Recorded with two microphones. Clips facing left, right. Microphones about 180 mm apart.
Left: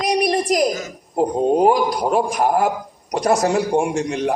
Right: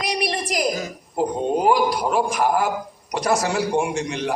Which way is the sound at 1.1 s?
45° left (ahead or behind).